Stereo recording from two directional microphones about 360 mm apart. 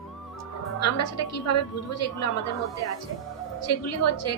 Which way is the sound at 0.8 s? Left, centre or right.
Left.